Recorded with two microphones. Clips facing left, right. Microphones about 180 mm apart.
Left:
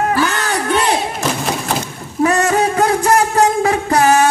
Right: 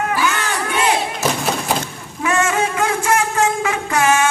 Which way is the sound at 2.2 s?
35° left (ahead or behind).